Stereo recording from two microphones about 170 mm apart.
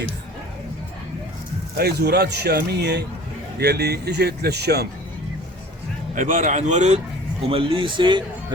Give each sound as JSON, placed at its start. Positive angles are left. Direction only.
{"t": 1.8, "sound": "speech", "side_deg": -70}
{"t": 6.1, "sound": "speech", "side_deg": -50}
{"t": 7.4, "sound": "a man's voice", "side_deg": -30}